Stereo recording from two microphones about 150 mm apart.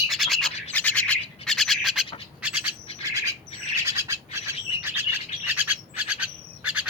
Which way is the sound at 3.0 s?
20° right (ahead or behind).